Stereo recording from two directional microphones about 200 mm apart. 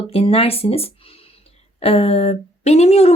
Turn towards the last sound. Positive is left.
turn(degrees=30)  # may be behind; listen again after turning